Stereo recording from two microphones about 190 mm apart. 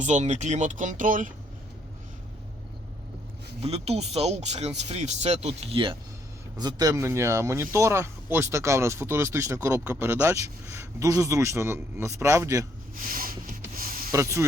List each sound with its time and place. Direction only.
0.0 s speech: 40° right (ahead or behind)
3.6 s speech: 35° right (ahead or behind); by 12.6 s 15° right (ahead or behind)
13.1 s a sound: 50° right (ahead or behind)
14.1 s speech: 15° right (ahead or behind)